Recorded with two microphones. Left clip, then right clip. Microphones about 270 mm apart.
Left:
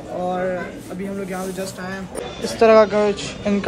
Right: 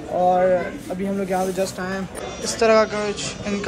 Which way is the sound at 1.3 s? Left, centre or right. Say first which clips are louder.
Right 5 dB; centre.